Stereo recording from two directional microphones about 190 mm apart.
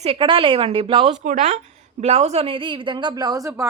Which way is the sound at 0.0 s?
30° right (ahead or behind).